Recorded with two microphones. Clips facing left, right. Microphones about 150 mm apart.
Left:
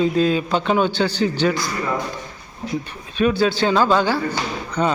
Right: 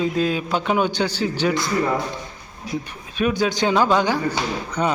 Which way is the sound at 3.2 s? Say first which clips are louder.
Left 2 dB; 15° right (ahead or behind).